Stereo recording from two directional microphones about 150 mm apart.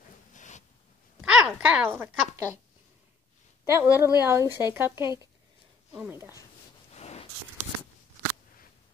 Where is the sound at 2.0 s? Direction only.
20° right (ahead or behind).